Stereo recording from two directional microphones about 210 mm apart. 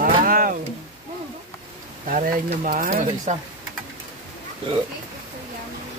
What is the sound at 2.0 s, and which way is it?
Speech, 40° right (ahead or behind).